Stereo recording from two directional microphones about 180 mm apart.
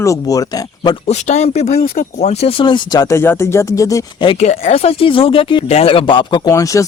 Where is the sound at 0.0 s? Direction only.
20° left (ahead or behind).